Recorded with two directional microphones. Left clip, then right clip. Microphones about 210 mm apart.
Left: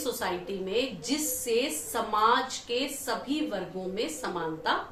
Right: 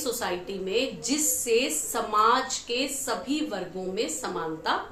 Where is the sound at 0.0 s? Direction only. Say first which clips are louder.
Right 2 dB; 15° right (ahead or behind).